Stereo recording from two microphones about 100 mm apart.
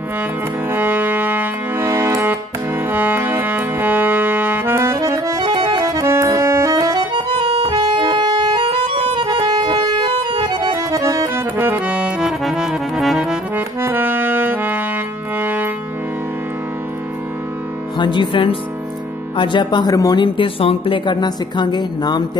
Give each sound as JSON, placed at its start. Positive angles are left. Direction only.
{"t": 0.7, "sound": "music", "side_deg": -20}
{"t": 5.8, "sound": "accordion", "side_deg": -35}
{"t": 7.2, "sound": "accordion", "side_deg": -55}
{"t": 10.0, "sound": "music", "side_deg": -65}
{"t": 10.5, "sound": "accordion", "side_deg": -45}
{"t": 11.5, "sound": "music", "side_deg": -20}
{"t": 13.6, "sound": "accordion", "side_deg": -20}
{"t": 15.3, "sound": "music", "side_deg": -15}
{"t": 17.9, "sound": "music", "side_deg": 50}
{"t": 19.3, "sound": "speech", "side_deg": 50}
{"t": 20.3, "sound": "speech", "side_deg": 65}